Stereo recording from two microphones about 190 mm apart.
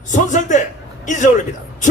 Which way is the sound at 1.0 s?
40° left (ahead or behind).